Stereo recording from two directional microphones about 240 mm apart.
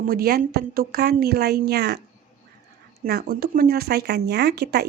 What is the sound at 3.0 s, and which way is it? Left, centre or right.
Speech, right.